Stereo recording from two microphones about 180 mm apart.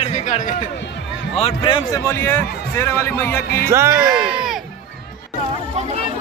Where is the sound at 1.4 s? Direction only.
30° left (ahead or behind).